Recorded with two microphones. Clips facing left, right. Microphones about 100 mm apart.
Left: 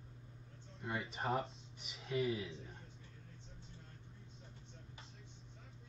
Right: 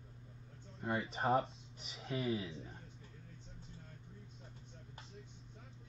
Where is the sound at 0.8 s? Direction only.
30° right (ahead or behind).